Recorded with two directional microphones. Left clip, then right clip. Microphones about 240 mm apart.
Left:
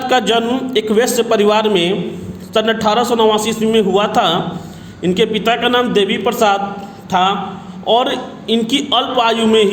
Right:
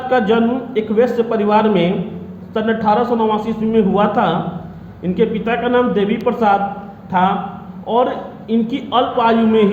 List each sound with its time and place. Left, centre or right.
0.1 s a man's voice: left